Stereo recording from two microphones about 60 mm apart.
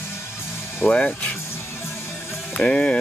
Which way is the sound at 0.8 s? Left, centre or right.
Left.